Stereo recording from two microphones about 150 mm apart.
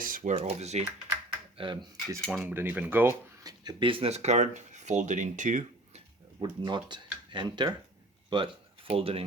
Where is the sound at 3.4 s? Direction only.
25° right (ahead or behind); by 6.0 s 55° right (ahead or behind).